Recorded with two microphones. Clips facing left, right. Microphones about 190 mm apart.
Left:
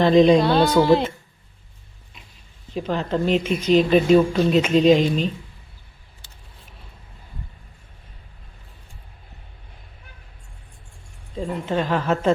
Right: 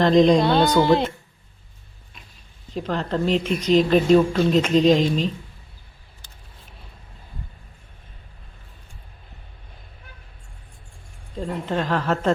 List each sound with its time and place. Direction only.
0.0 s speech: 5° left (ahead or behind)
2.7 s speech: 5° left (ahead or behind)
11.3 s speech: 5° left (ahead or behind)